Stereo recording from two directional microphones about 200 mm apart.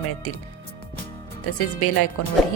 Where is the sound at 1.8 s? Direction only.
90° left.